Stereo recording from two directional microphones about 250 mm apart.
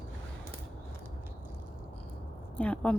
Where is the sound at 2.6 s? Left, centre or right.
Centre.